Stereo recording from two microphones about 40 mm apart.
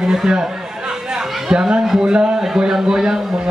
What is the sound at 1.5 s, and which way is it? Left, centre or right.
A man's voice, centre.